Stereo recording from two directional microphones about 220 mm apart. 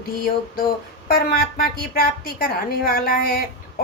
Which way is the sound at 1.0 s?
40° left (ahead or behind).